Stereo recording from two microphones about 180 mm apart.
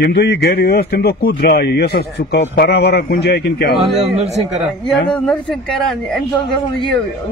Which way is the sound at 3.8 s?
35° right (ahead or behind).